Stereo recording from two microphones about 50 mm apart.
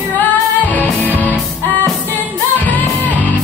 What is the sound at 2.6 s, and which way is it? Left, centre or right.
Music, left.